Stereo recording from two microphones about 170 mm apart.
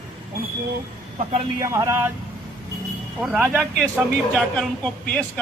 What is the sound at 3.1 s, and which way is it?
Speech, 10° right (ahead or behind).